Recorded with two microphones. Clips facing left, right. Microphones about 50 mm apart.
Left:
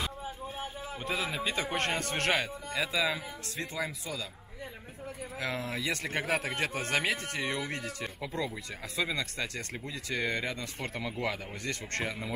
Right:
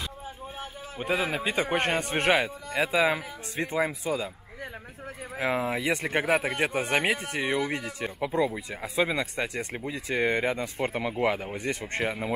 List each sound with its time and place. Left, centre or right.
0.9 s speech: centre
5.4 s speech: right
9.2 s speech: centre